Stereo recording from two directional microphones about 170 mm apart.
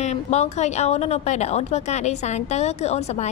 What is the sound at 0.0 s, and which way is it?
A woman's voice, 40° left (ahead or behind).